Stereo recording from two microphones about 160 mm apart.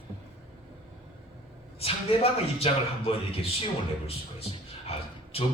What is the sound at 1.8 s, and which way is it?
Speech, 40° left (ahead or behind).